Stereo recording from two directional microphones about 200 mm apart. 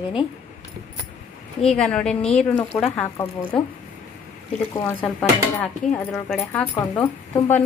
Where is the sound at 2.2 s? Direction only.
30° left (ahead or behind).